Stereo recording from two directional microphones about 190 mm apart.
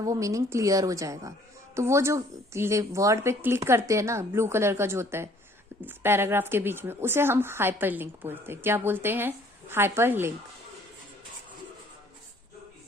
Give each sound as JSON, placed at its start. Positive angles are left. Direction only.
{"t": 0.0, "sound": "a woman's voice", "side_deg": -15}